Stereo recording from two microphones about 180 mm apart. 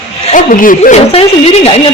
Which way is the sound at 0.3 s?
45° left (ahead or behind).